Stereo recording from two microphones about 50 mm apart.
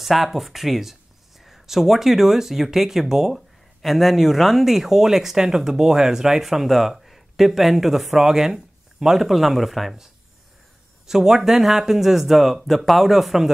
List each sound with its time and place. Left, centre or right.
0.0 s speech: centre
11.1 s speech: centre